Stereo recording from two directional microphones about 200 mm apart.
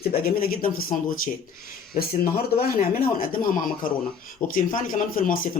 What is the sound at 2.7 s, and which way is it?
Speech, 45° left (ahead or behind).